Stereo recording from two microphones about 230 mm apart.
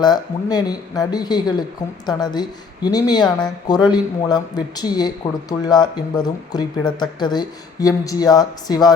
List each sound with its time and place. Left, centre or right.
0.0 s speech: centre